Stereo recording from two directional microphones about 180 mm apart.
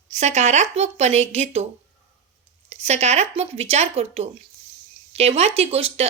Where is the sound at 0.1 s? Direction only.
40° right (ahead or behind).